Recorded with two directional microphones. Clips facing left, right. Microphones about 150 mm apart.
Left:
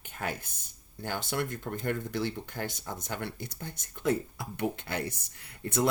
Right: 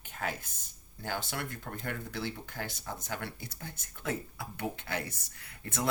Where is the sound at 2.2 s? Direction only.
20° left (ahead or behind).